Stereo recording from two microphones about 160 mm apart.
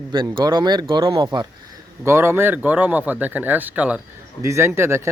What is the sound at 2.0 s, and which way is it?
Speech, 15° right (ahead or behind).